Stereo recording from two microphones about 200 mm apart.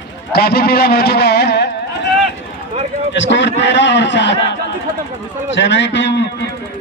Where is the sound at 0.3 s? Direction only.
50° left (ahead or behind).